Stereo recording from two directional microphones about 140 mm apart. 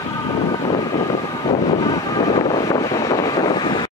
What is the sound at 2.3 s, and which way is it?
Vehicle, 35° left (ahead or behind).